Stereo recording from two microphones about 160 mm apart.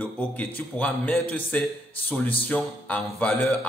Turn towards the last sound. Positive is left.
turn(degrees=10)  # may be behind; listen again after turning